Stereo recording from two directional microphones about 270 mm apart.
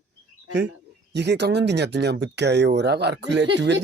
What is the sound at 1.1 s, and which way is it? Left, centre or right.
Speech, right.